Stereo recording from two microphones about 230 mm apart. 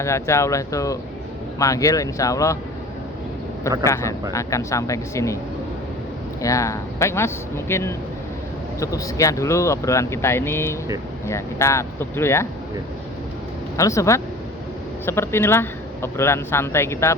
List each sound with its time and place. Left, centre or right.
0.0 s speech: centre
3.8 s speech: centre
6.4 s speech: centre
13.7 s speech: centre